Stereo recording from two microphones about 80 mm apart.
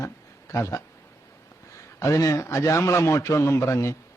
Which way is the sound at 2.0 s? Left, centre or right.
Left.